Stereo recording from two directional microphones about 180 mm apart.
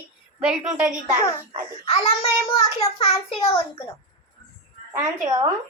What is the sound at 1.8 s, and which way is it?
A child's voice, 30° left (ahead or behind).